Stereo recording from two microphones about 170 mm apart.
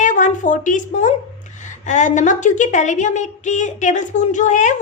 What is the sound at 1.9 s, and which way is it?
A woman's voice, 45° left (ahead or behind).